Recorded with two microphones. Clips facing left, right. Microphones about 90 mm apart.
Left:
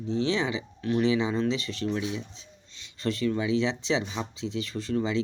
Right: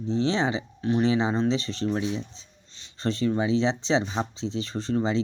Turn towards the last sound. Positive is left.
turn(degrees=-30)  # may be behind; listen again after turning